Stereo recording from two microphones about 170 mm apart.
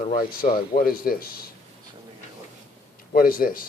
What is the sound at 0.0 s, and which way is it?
Speech, 55° left (ahead or behind).